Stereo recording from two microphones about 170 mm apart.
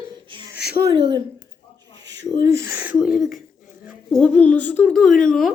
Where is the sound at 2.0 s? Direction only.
90° right.